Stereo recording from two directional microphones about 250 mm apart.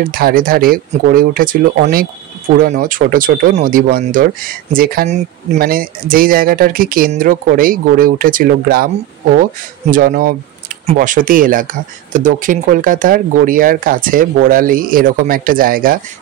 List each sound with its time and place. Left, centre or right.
0.1 s speech: right